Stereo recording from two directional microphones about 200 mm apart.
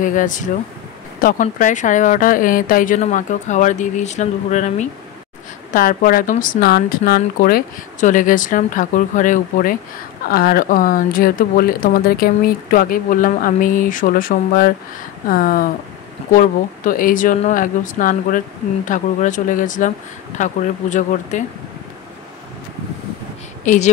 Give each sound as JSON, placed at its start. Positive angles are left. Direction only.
{"t": 0.0, "sound": "a woman's voice", "side_deg": 40}
{"t": 23.6, "sound": "speech", "side_deg": 40}